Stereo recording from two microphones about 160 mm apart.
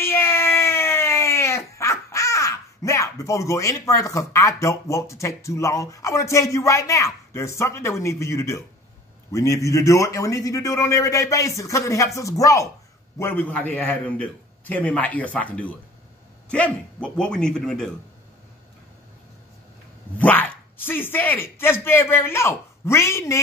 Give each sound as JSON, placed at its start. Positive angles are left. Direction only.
{"t": 0.0, "sound": "a man's voice", "side_deg": 15}
{"t": 20.2, "sound": "speech", "side_deg": 10}